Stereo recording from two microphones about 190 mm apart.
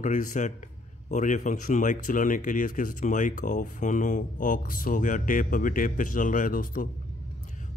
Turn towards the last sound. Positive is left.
turn(degrees=45)  # may be behind; listen again after turning